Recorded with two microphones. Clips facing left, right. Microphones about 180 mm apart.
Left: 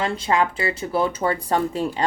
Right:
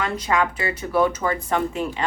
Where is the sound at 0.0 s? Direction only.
30° left (ahead or behind).